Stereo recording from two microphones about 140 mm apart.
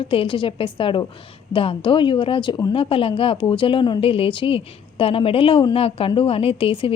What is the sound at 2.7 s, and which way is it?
A woman's voice, 40° left (ahead or behind).